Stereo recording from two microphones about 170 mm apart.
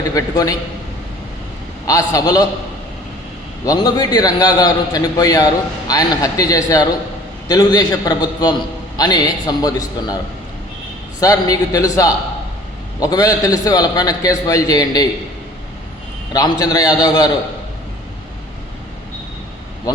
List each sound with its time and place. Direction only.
0.1 s a man's voice: 20° left (ahead or behind)
1.9 s a man's voice: 20° left (ahead or behind)
3.7 s a man's voice: 25° left (ahead or behind)
11.2 s a man's voice: 20° left (ahead or behind)
16.3 s a man's voice: 20° left (ahead or behind)